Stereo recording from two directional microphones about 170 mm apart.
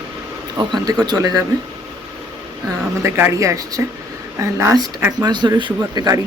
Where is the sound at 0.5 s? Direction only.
25° right (ahead or behind).